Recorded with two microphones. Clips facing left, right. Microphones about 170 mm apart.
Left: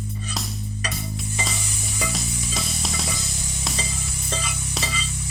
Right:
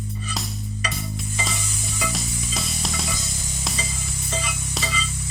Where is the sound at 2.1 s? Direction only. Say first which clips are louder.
Even; centre (ahead or behind).